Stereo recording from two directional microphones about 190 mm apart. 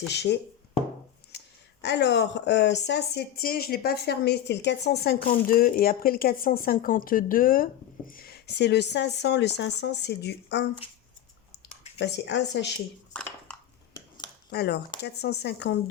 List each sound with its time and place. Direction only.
0.1 s speech: 65° left (ahead or behind)
1.8 s speech: 60° left (ahead or behind)
11.9 s speech: 65° left (ahead or behind)
13.1 s speech: 5° left (ahead or behind)
13.5 s a sound: 5° left (ahead or behind)
14.5 s speech: 60° left (ahead or behind)